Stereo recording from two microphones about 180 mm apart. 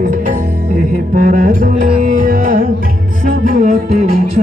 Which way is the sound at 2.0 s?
45° right (ahead or behind).